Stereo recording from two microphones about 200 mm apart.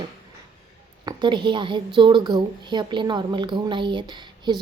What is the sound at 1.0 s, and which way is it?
A woman's voice, 25° right (ahead or behind).